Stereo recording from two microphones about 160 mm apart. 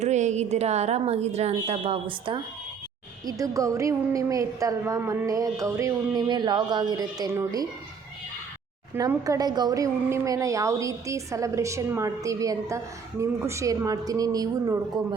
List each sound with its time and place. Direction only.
0.0 s a woman's voice: 45° right (ahead or behind)
3.2 s a woman's voice: 20° right (ahead or behind)
9.0 s a woman's voice: 20° right (ahead or behind)